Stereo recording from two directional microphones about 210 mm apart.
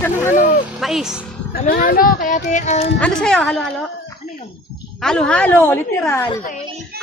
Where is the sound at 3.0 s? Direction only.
5° left (ahead or behind).